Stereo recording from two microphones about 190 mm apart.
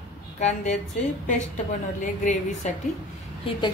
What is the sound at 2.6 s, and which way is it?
Speech, 35° left (ahead or behind).